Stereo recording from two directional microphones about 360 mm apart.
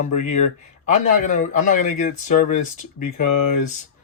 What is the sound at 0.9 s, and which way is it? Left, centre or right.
Speech, left.